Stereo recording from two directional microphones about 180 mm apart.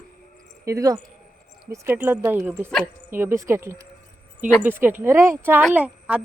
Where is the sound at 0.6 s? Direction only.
20° right (ahead or behind).